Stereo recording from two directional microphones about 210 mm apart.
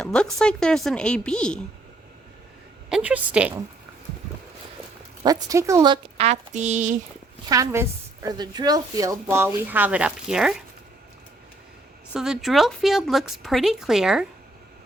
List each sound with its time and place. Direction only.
0.0 s speech: 5° left (ahead or behind)
2.9 s a woman's voice: 5° right (ahead or behind)
5.2 s a woman's voice: 15° right (ahead or behind); by 6.9 s 35° right (ahead or behind)
7.4 s a woman's voice: 15° right (ahead or behind)
12.1 s speech: centre (ahead or behind)